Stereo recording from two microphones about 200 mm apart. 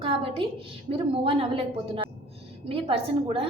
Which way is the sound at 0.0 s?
25° right (ahead or behind).